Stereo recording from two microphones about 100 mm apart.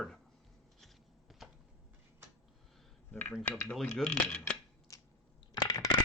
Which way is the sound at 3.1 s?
15° left (ahead or behind).